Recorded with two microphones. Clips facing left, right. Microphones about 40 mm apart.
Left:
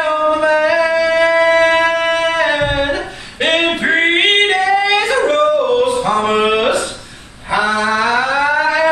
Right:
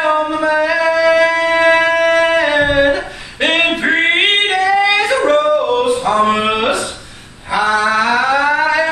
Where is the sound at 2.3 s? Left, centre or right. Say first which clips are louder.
Right 2 dB; centre.